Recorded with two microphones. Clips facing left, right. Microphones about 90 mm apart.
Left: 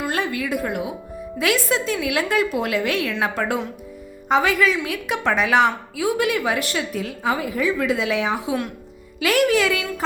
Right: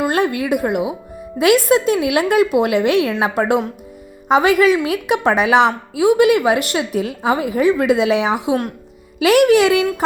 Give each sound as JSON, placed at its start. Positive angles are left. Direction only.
{"t": 0.0, "sound": "a woman's voice", "side_deg": -60}
{"t": 1.4, "sound": "a woman's voice", "side_deg": -65}